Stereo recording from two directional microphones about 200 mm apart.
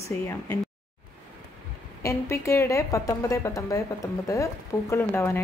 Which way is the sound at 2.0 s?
15° left (ahead or behind).